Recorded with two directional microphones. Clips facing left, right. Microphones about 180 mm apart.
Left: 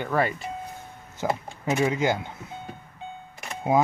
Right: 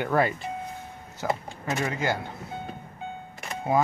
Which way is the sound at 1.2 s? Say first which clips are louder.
Left 2 dB; 15° left (ahead or behind).